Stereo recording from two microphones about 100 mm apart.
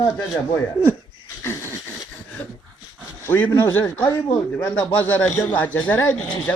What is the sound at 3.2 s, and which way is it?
A man's voice, 20° left (ahead or behind).